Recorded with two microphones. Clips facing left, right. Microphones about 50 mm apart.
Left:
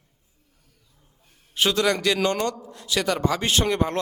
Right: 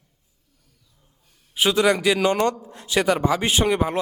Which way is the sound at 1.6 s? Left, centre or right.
Centre.